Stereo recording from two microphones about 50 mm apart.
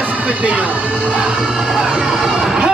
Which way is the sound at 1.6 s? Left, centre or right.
Centre.